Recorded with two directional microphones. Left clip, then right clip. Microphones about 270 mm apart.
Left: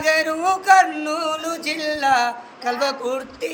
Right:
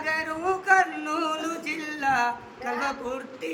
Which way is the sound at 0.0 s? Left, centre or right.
Left.